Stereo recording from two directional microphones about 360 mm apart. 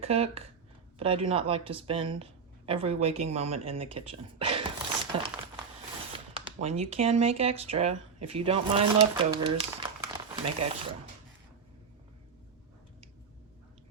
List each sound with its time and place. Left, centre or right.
0.0 s speech: centre